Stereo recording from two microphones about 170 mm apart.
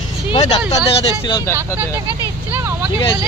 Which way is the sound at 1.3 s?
20° left (ahead or behind).